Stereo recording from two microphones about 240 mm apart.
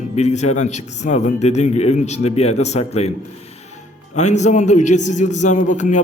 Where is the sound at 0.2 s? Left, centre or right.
Left.